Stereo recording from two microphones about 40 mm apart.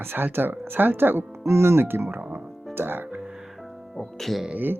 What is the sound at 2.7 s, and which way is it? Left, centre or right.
Speech, right.